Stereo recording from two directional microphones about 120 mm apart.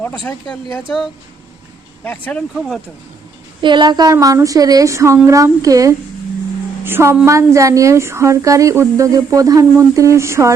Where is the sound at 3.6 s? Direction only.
40° right (ahead or behind).